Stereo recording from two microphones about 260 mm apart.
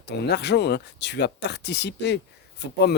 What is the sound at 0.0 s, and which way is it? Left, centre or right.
Speech, left.